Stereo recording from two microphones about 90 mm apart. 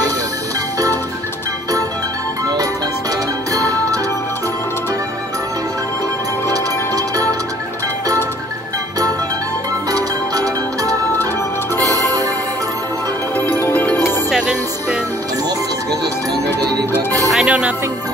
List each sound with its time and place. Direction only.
2.4 s music: 45° right (ahead or behind)
9.8 s music: 45° right (ahead or behind)
13.6 s music: 25° left (ahead or behind)
14.3 s music: 10° right (ahead or behind)
17.5 s music: 15° right (ahead or behind)